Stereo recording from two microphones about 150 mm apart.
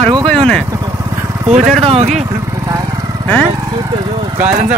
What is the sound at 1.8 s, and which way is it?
Speech, 40° right (ahead or behind).